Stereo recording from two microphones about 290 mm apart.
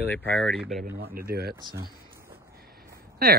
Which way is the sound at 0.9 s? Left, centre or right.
Right.